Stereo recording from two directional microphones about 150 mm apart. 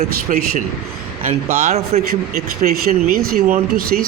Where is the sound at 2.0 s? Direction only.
75° right (ahead or behind).